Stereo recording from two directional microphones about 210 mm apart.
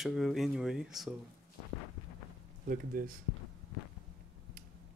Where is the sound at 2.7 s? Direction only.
40° right (ahead or behind).